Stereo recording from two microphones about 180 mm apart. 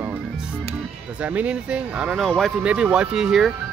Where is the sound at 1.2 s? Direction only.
10° right (ahead or behind).